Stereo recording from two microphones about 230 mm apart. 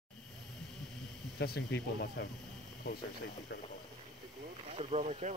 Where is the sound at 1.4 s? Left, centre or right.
Left.